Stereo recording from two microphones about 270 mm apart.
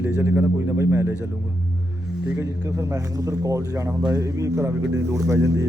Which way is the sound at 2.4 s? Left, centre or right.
Centre.